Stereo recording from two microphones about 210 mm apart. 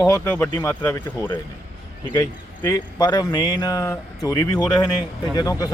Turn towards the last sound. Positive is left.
turn(degrees=15)  # may be behind; listen again after turning